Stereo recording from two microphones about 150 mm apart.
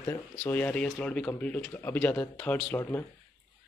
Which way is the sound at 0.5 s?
10° left (ahead or behind).